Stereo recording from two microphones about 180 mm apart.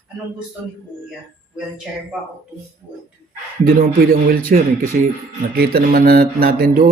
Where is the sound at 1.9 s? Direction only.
Centre (ahead or behind).